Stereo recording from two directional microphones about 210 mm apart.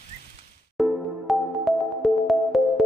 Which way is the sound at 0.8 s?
Centre (ahead or behind).